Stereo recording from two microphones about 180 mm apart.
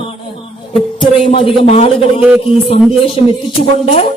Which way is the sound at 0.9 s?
30° left (ahead or behind).